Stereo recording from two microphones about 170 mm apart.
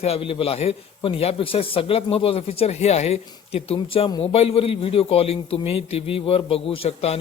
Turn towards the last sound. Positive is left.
turn(degrees=35)  # may be behind; listen again after turning